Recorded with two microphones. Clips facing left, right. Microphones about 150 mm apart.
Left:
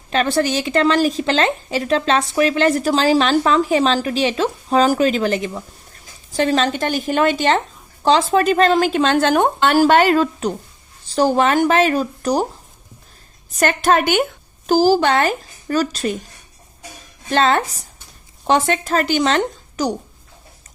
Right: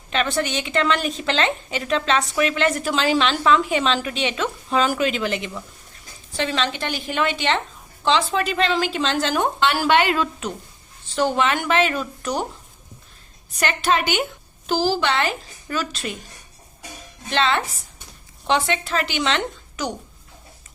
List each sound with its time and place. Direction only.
0.1 s a woman's voice: 35° left (ahead or behind)
13.6 s a woman's voice: 45° left (ahead or behind)
17.2 s a woman's voice: 45° left (ahead or behind)